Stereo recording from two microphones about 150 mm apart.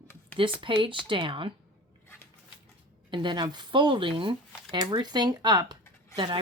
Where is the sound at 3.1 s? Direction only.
30° right (ahead or behind).